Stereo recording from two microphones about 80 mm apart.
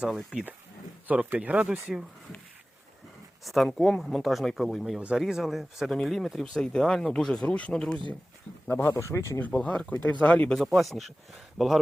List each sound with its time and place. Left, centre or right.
0.3 s speech: centre
1.7 s speech: centre
3.4 s speech: centre
8.7 s speech: left
9.4 s speech: centre
10.7 s speech: centre